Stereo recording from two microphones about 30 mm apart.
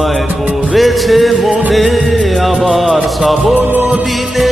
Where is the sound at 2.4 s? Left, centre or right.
Centre.